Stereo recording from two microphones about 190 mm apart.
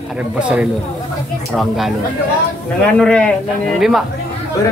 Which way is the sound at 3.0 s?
5° left (ahead or behind).